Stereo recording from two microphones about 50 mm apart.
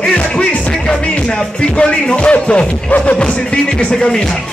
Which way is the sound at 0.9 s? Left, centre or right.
Centre.